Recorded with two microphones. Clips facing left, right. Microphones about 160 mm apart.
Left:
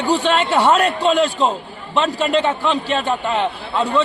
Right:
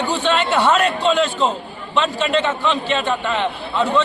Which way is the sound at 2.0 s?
40° left (ahead or behind).